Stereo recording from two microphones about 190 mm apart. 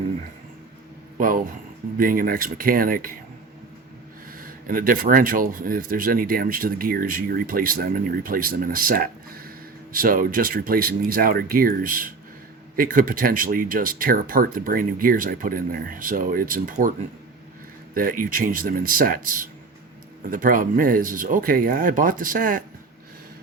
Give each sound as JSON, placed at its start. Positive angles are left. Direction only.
{"t": 1.2, "sound": "speech", "side_deg": -45}
{"t": 4.4, "sound": "speech", "side_deg": -50}
{"t": 17.9, "sound": "speech", "side_deg": -45}